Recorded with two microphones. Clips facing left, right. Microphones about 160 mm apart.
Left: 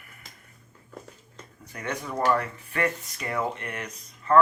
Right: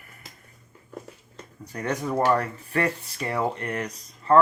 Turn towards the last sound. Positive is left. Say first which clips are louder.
# right 3 dB
turn(degrees=-35)  # may be behind; listen again after turning